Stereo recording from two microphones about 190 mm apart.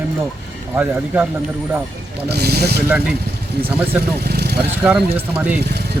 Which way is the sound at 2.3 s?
55° right (ahead or behind).